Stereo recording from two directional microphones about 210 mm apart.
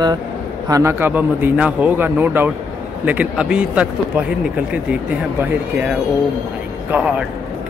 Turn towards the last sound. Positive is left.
turn(degrees=-5)  # may be behind; listen again after turning